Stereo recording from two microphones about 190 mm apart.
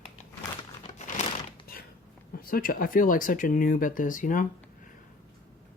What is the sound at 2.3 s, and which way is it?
Speech, 50° left (ahead or behind).